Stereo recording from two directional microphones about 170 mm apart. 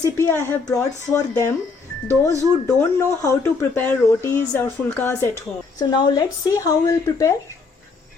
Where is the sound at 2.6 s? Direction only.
15° left (ahead or behind).